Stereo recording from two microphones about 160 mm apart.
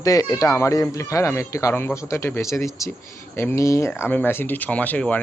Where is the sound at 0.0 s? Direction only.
20° left (ahead or behind).